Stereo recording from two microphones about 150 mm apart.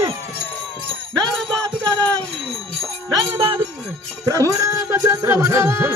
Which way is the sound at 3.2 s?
30° right (ahead or behind).